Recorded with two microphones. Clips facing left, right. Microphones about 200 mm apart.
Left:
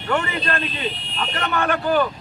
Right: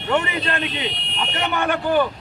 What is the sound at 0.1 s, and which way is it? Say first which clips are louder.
Speech: right 1 dB; 20° right (ahead or behind).